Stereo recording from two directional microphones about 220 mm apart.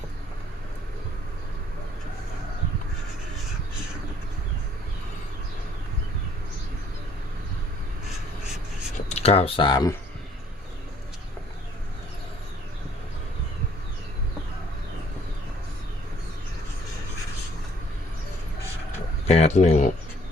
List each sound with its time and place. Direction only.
9.0 s speech: 30° left (ahead or behind)
19.3 s speech: 30° left (ahead or behind)